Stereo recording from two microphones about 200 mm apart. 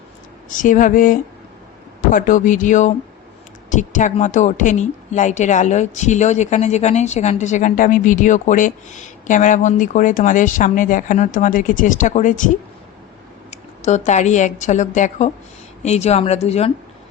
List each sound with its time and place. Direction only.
0.5 s a woman's voice: 40° left (ahead or behind)
13.5 s a woman's voice: 35° left (ahead or behind)